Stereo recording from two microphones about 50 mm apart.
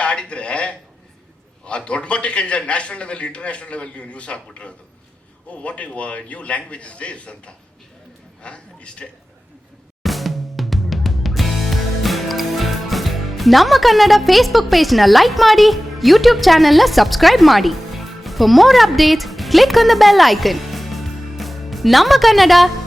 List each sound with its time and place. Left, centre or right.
0.0 s a sound: left
1.6 s a man's voice: left
10.0 s music: centre